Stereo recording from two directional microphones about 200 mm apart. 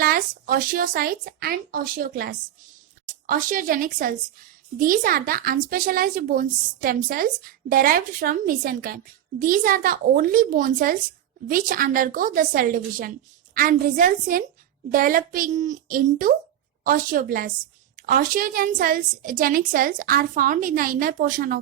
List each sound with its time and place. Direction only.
0.0 s speech: 45° right (ahead or behind)